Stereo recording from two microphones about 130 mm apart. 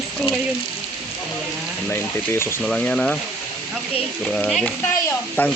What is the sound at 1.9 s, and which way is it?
Speech, 20° left (ahead or behind).